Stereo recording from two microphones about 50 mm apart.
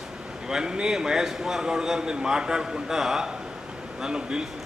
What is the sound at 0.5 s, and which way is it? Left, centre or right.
A man's voice, centre.